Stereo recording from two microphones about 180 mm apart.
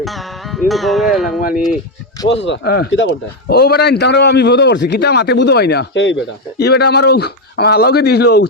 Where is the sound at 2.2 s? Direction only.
80° left.